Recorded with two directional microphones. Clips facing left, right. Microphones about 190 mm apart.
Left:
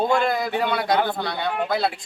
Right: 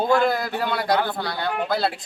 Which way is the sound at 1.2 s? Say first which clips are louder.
Left 1 dB; centre (ahead or behind).